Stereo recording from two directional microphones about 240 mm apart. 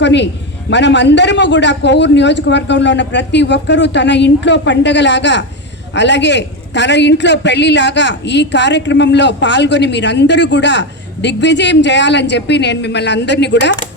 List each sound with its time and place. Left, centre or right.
0.0 s a man's voice: left